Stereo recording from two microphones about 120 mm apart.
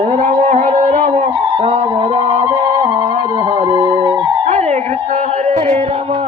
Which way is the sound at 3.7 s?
35° right (ahead or behind).